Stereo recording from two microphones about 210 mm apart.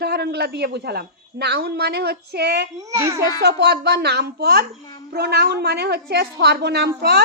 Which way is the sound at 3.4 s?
50° right (ahead or behind).